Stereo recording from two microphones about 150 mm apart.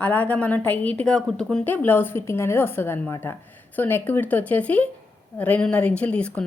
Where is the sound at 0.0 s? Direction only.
10° left (ahead or behind).